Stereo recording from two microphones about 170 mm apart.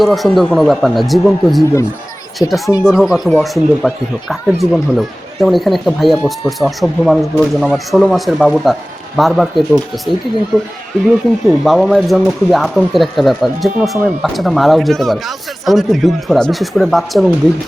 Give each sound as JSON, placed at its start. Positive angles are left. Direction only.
{"t": 0.0, "sound": "speech", "side_deg": 0}
{"t": 2.4, "sound": "speech", "side_deg": 20}
{"t": 2.8, "sound": "speech", "side_deg": -5}
{"t": 11.4, "sound": "speech", "side_deg": 0}